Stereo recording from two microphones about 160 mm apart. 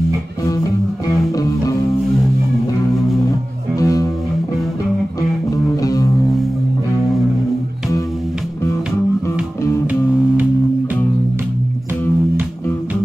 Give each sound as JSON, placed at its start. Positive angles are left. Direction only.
{"t": 1.3, "sound": "music", "side_deg": 20}
{"t": 3.7, "sound": "music", "side_deg": 20}
{"t": 5.8, "sound": "music", "side_deg": 20}